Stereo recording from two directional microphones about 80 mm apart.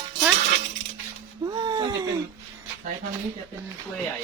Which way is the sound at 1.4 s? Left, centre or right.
Right.